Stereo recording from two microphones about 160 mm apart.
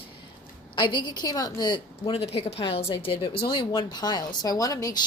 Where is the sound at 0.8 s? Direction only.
30° left (ahead or behind).